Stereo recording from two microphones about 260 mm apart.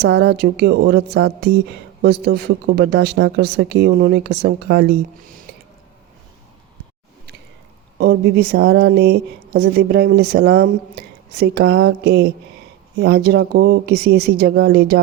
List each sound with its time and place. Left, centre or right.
0.0 s speech: right
7.9 s speech: right